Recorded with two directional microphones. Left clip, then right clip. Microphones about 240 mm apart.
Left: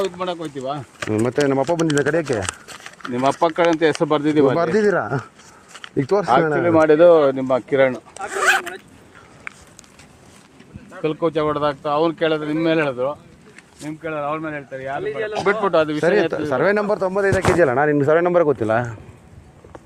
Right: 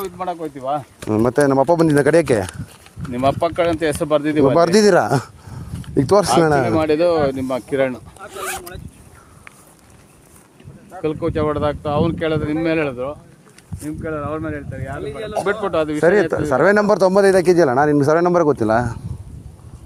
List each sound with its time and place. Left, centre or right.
1.1 s speech: right
2.5 s a sound: left
3.1 s speech: right
4.6 s speech: right
6.0 s speech: right
11.0 s speech: centre
16.5 s speech: right
17.7 s speech: right